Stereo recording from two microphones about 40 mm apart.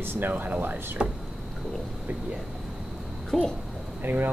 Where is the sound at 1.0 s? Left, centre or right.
Right.